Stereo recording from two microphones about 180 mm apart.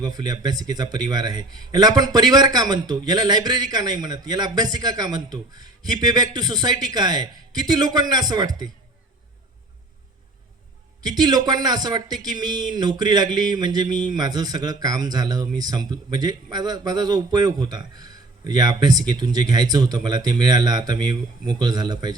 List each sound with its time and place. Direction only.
0.0 s a man's voice: 20° right (ahead or behind)
11.1 s a man's voice: 20° right (ahead or behind)